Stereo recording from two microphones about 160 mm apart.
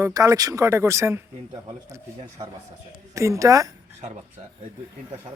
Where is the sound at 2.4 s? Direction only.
30° right (ahead or behind).